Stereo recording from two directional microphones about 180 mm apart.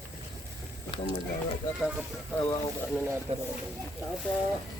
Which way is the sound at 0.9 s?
30° left (ahead or behind).